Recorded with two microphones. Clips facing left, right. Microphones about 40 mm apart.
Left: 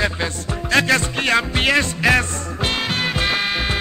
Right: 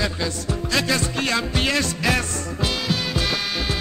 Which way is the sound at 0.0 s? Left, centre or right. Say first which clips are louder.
Left 3 dB; left.